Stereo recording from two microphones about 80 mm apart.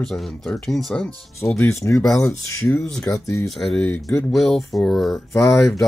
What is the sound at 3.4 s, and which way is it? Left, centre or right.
Speech, centre.